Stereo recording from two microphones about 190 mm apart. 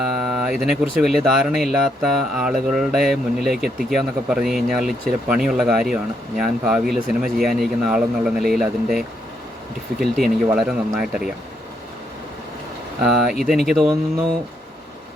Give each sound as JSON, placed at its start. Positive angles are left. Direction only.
{"t": 0.0, "sound": "speech", "side_deg": 0}
{"t": 13.0, "sound": "speech", "side_deg": 0}